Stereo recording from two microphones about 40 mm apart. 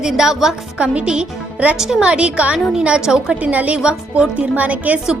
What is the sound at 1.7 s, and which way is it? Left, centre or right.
Speech, centre.